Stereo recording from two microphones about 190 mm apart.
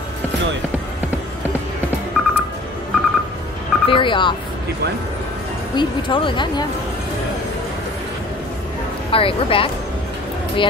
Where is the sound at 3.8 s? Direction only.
25° left (ahead or behind).